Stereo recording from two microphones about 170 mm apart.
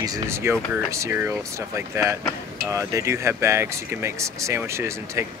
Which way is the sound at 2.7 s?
15° right (ahead or behind).